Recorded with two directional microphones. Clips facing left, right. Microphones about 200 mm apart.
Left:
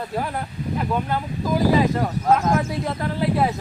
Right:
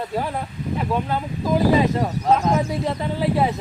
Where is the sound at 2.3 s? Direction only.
Centre (ahead or behind).